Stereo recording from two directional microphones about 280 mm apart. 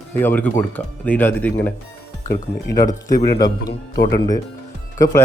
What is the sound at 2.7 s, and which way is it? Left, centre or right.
Speech, left.